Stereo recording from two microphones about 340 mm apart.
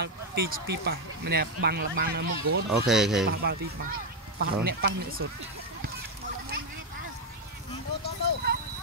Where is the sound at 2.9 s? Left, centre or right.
Centre.